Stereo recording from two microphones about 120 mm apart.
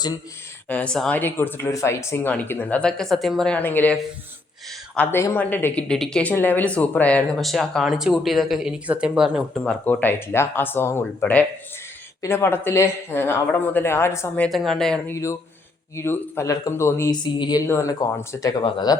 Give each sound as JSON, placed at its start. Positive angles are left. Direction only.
{"t": 0.7, "sound": "speech", "side_deg": 10}
{"t": 1.2, "sound": "speech", "side_deg": 15}
{"t": 4.9, "sound": "speech", "side_deg": 20}
{"t": 5.9, "sound": "speech", "side_deg": 5}
{"t": 6.3, "sound": "speech", "side_deg": 15}
{"t": 9.6, "sound": "speech", "side_deg": 15}
{"t": 14.5, "sound": "speech", "side_deg": 0}
{"t": 15.0, "sound": "speech", "side_deg": 25}
{"t": 17.1, "sound": "speech", "side_deg": 40}
{"t": 18.6, "sound": "speech", "side_deg": 35}